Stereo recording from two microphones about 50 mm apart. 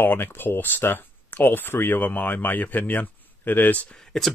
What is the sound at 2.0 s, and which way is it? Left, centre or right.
Speech, left.